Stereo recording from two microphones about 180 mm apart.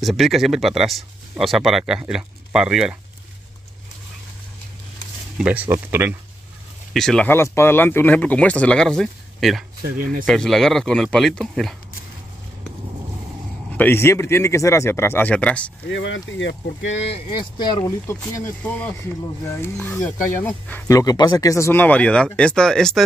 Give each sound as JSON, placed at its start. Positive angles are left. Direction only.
{"t": 0.0, "sound": "speech", "side_deg": 0}
{"t": 5.4, "sound": "speech", "side_deg": -10}
{"t": 6.9, "sound": "speech", "side_deg": 0}
{"t": 9.8, "sound": "speech", "side_deg": -50}
{"t": 10.2, "sound": "speech", "side_deg": 5}
{"t": 13.7, "sound": "speech", "side_deg": 15}
{"t": 15.9, "sound": "speech", "side_deg": 90}
{"t": 17.1, "sound": "speech", "side_deg": 25}
{"t": 18.0, "sound": "speech", "side_deg": 10}
{"t": 21.0, "sound": "speech", "side_deg": 20}